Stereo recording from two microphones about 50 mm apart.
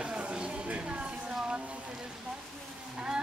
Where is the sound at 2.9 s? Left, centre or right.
Centre.